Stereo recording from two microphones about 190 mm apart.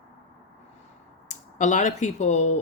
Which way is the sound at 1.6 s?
40° left (ahead or behind).